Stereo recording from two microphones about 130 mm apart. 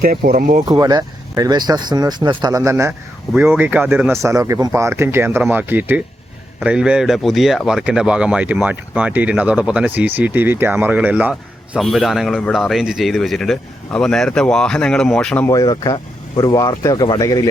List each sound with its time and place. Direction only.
0.0 s speech: 90° right
0.7 s speech: 30° right (ahead or behind); by 11.8 s 10° right (ahead or behind)
11.8 s speech: centre (ahead or behind)
15.4 s speech: 25° left (ahead or behind)